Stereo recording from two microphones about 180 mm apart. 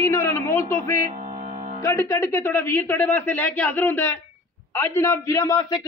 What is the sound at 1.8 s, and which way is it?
A man's voice, 15° left (ahead or behind).